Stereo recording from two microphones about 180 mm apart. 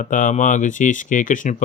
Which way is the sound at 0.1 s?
45° left (ahead or behind).